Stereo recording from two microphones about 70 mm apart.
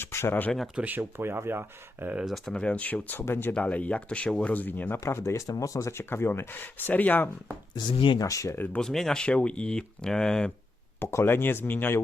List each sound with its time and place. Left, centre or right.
0.0 s speech: left
0.8 s speech: right
1.1 s speech: right
2.2 s speech: centre; by 3.5 s left
3.6 s speech: left
5.0 s speech: left
5.5 s speech: left
5.9 s speech: left
7.8 s speech: left
8.3 s speech: left
8.8 s speech: centre
11.1 s speech: left